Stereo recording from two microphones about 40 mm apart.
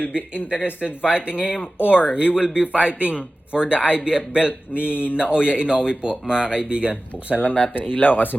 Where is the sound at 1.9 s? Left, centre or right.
Right.